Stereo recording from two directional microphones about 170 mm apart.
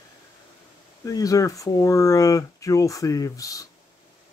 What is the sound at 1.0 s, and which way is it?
Speech, 20° left (ahead or behind).